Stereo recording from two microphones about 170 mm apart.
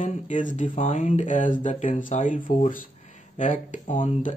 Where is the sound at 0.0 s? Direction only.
45° left (ahead or behind).